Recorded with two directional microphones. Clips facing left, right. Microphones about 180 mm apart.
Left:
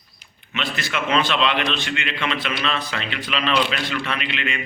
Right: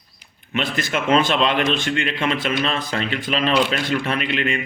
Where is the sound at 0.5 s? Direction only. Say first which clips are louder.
Right 4 dB; 50° right (ahead or behind).